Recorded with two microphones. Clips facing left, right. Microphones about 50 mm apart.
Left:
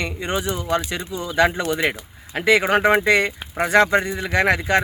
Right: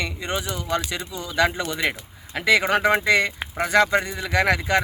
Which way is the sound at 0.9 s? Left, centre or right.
Left.